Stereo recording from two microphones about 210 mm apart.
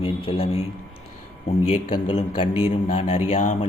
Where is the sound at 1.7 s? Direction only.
25° left (ahead or behind).